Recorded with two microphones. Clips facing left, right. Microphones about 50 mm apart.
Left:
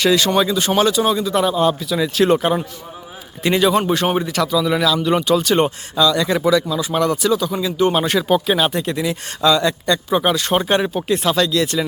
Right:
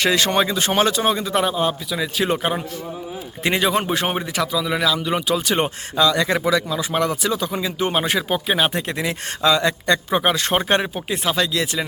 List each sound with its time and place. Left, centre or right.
0.0 s speech: right
1.5 s a man's voice: centre
3.4 s speech: right
6.0 s speech: right
9.4 s speech: right
10.9 s speech: centre